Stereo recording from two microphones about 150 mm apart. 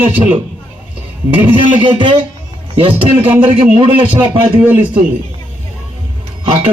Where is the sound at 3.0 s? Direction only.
10° right (ahead or behind).